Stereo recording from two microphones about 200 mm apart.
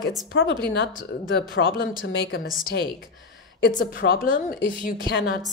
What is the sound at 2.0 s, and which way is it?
Speech, 50° left (ahead or behind).